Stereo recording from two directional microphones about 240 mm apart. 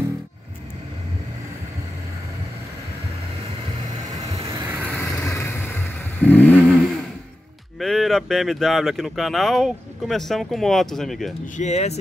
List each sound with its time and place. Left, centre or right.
4.3 s vehicle: centre
4.8 s vehicle: centre
7.8 s speech: centre
11.5 s speech: left